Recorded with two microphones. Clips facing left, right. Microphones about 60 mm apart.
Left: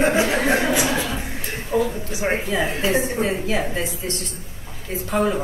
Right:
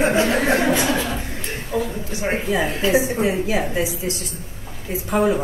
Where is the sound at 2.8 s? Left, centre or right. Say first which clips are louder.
Right 4 dB; left.